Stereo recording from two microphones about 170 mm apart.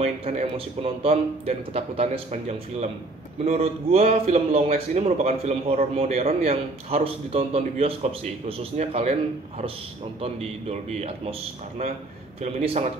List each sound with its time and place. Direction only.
0.0 s a man's voice: 35° right (ahead or behind)
10.2 s a man's voice: 35° right (ahead or behind)
12.4 s a man's voice: 40° right (ahead or behind)